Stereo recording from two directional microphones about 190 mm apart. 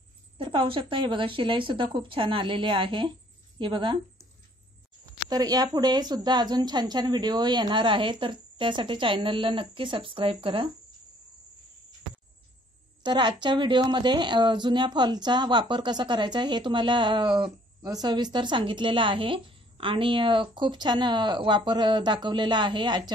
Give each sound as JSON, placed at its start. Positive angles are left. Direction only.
{"t": 0.4, "sound": "a woman's voice", "side_deg": -25}
{"t": 5.3, "sound": "a woman's voice", "side_deg": -20}
{"t": 13.0, "sound": "a woman's voice", "side_deg": -25}